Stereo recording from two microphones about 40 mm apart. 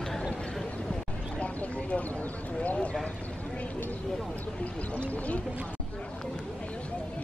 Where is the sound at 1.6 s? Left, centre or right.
Left.